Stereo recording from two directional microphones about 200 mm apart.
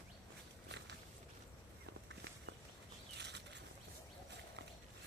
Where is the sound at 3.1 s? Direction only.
60° right (ahead or behind).